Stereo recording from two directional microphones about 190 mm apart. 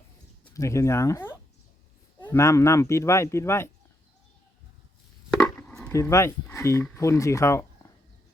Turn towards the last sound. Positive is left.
turn(degrees=15)  # may be behind; listen again after turning